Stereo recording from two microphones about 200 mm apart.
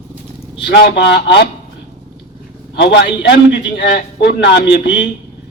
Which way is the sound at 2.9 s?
60° left (ahead or behind).